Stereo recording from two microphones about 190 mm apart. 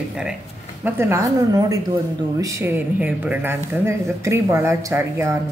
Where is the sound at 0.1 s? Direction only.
5° right (ahead or behind).